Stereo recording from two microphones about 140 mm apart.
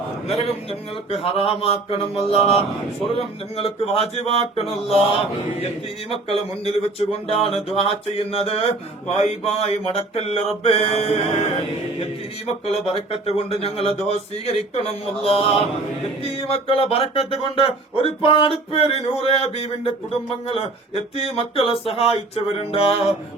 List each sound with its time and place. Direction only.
1.1 s speech: 40° left (ahead or behind)
12.6 s speech: 45° left (ahead or behind)